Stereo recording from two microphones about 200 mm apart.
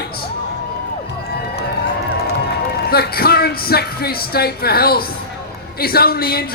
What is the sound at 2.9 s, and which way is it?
A woman's voice, 50° left (ahead or behind).